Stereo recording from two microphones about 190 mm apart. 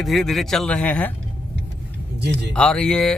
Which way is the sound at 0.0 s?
Centre (ahead or behind).